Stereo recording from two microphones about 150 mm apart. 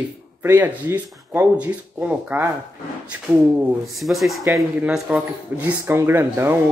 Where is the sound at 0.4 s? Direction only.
15° right (ahead or behind).